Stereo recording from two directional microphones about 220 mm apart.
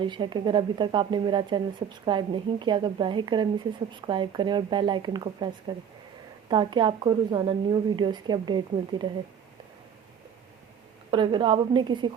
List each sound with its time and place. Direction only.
0.0 s speech: 20° right (ahead or behind)
11.1 s speech: 20° right (ahead or behind)